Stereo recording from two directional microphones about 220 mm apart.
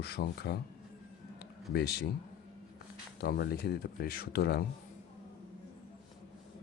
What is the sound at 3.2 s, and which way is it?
Speech, 45° left (ahead or behind).